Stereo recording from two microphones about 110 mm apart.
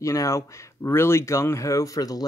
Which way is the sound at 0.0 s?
30° left (ahead or behind).